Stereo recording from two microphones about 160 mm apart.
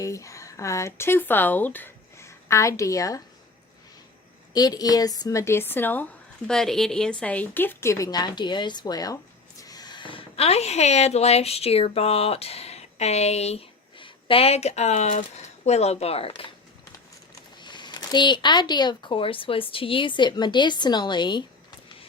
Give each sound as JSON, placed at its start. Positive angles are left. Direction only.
{"t": 0.0, "sound": "speech", "side_deg": 20}
{"t": 4.5, "sound": "a woman's voice", "side_deg": 25}
{"t": 17.6, "sound": "speech", "side_deg": 30}